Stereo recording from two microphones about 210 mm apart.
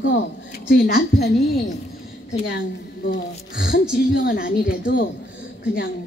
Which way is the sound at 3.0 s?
40° left (ahead or behind).